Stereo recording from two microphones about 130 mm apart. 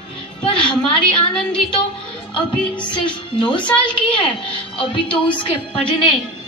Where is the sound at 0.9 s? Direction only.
45° left (ahead or behind).